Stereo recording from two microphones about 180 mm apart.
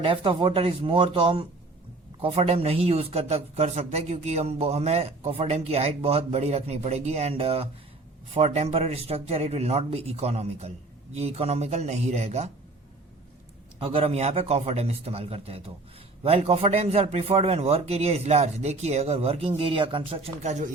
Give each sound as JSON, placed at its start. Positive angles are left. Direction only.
{"t": 0.0, "sound": "a man's voice", "side_deg": -30}
{"t": 13.7, "sound": "a man's voice", "side_deg": -30}